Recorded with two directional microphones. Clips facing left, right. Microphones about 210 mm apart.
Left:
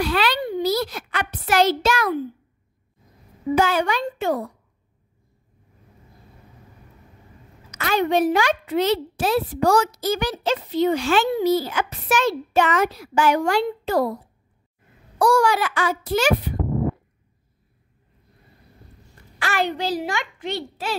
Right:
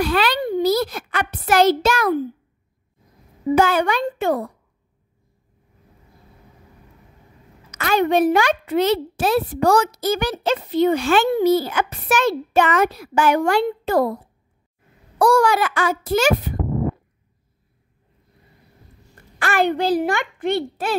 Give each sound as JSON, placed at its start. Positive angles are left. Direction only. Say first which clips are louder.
{"t": 0.0, "sound": "a child's voice", "louder": "right 2 dB", "side_deg": -50}
{"t": 3.5, "sound": "a child's voice", "louder": "right 3 dB", "side_deg": -55}
{"t": 7.7, "sound": "a child's voice", "louder": "right 3 dB", "side_deg": -50}
{"t": 15.1, "sound": "a child's voice", "louder": "right 2 dB", "side_deg": -55}
{"t": 19.3, "sound": "a child's voice", "louder": "right 5 dB", "side_deg": -50}